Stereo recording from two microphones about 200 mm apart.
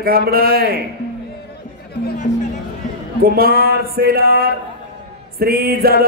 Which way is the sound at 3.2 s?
50° right (ahead or behind).